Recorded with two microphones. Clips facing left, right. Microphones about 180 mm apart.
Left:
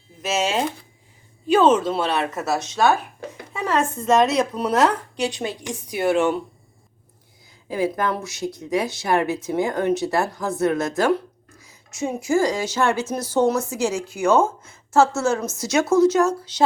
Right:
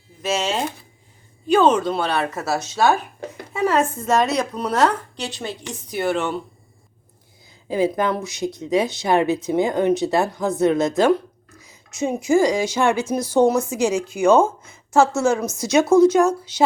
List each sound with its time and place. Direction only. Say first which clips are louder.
0.2 s speech: even; 5° left (ahead or behind)
7.7 s a woman's voice: right 3 dB; 20° right (ahead or behind)